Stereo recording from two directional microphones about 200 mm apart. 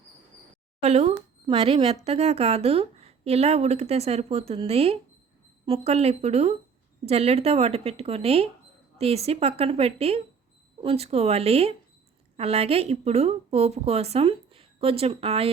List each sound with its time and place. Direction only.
0.8 s speech: 30° right (ahead or behind)